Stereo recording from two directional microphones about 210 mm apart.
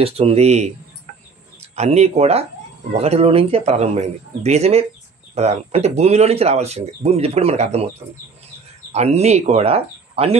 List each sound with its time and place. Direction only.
0.0 s speech: 30° right (ahead or behind)
1.8 s speech: 30° right (ahead or behind)
8.9 s speech: 30° right (ahead or behind)